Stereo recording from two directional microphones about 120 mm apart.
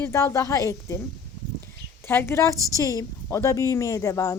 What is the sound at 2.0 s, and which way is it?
A woman's voice, 20° left (ahead or behind).